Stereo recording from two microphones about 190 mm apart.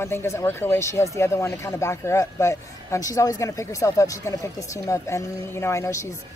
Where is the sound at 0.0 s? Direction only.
15° left (ahead or behind).